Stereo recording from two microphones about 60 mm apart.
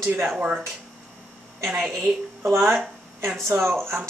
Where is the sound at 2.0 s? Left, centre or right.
Right.